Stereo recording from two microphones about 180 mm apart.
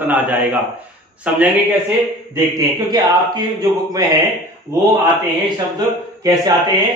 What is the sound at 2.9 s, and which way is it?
A man's voice, 25° right (ahead or behind).